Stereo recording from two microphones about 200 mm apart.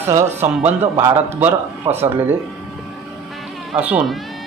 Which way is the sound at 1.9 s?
25° right (ahead or behind).